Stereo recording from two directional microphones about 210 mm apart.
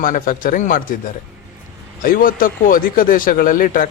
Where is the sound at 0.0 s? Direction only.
40° left (ahead or behind).